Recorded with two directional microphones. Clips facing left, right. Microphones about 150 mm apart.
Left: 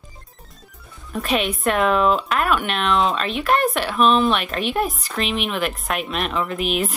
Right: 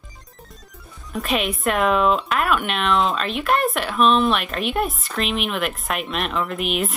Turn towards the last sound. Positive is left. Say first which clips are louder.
# left 1 dB
turn(degrees=0)  # may be behind; listen again after turning